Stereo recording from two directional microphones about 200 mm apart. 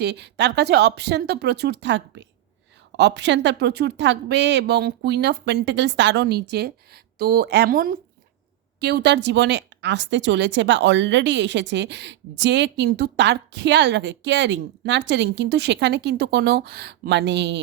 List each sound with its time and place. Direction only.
0.0 s speech: 55° right (ahead or behind)